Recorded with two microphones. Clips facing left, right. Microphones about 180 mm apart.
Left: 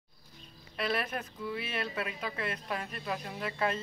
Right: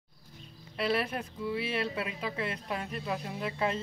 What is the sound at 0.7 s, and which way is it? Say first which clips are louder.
Speech: right 3 dB; 30° right (ahead or behind).